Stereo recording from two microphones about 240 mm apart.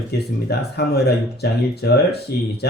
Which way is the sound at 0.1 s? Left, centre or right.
Left.